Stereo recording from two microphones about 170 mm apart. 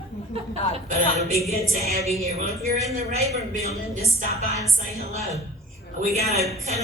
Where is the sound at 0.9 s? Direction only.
45° right (ahead or behind).